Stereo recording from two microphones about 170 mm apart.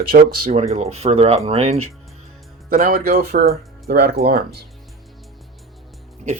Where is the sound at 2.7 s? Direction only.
55° right (ahead or behind).